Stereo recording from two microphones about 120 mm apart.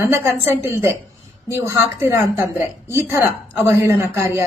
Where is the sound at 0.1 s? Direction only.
20° right (ahead or behind).